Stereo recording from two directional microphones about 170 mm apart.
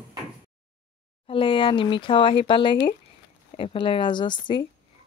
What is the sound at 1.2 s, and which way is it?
Speech, 30° left (ahead or behind).